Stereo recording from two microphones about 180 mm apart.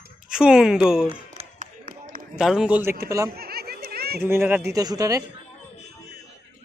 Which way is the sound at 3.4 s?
60° right (ahead or behind).